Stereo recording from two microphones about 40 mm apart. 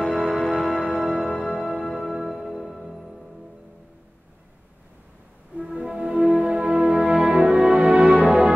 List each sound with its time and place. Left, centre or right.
0.0 s music: centre
5.8 s music: right
6.2 s music: centre
7.6 s music: right